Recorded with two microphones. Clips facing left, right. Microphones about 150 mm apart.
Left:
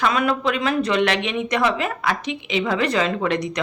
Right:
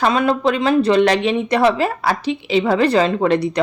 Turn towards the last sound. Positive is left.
turn(degrees=-30)  # may be behind; listen again after turning